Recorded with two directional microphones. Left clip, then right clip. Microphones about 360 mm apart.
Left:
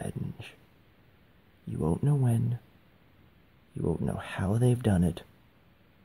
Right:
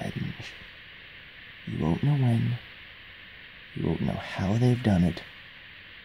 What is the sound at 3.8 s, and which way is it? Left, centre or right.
Speech, centre.